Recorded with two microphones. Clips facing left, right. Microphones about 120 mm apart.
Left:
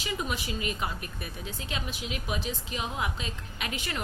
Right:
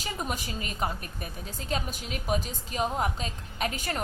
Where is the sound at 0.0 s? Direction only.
45° right (ahead or behind).